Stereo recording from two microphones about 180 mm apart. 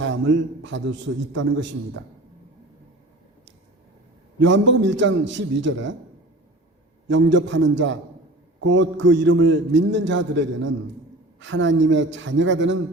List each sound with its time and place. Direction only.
0.0 s a man's voice: 90° right
4.4 s a man's voice: 90° right
7.1 s a man's voice: 90° right